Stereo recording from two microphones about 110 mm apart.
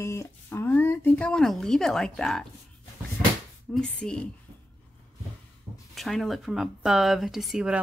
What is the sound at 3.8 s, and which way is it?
Speech, 10° left (ahead or behind).